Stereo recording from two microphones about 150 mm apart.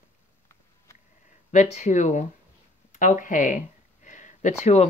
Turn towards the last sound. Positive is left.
turn(degrees=50)  # may be behind; listen again after turning